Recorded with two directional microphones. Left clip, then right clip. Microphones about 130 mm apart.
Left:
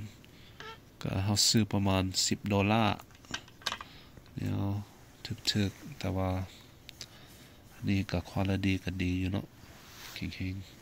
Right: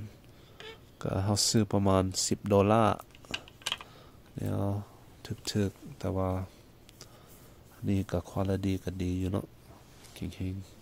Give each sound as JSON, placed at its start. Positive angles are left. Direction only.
{"t": 0.9, "sound": "speech", "side_deg": -45}
{"t": 4.4, "sound": "speech", "side_deg": -50}
{"t": 6.0, "sound": "speech", "side_deg": -25}
{"t": 7.8, "sound": "speech", "side_deg": -35}